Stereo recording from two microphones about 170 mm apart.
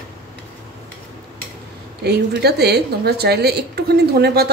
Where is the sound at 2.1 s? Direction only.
75° right (ahead or behind).